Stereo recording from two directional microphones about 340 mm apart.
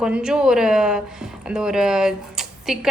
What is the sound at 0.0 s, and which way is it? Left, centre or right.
A woman's voice, centre.